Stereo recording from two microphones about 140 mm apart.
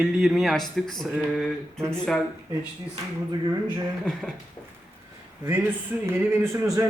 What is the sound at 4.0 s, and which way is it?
Speech, 5° left (ahead or behind).